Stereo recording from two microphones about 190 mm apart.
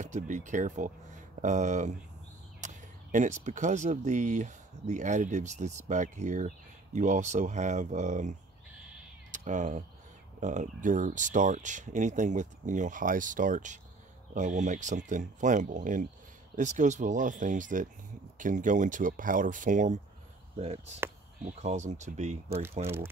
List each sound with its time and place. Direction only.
0.0 s speech: 40° right (ahead or behind)
22.6 s speech: 10° right (ahead or behind)